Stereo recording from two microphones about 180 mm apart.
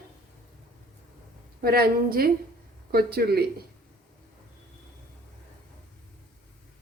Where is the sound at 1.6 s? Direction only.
60° right (ahead or behind).